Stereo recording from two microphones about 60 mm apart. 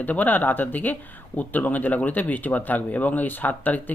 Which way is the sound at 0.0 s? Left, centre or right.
Left.